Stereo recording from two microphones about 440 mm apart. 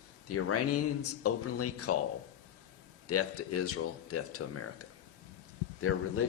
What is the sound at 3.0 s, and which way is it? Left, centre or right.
Speech, left.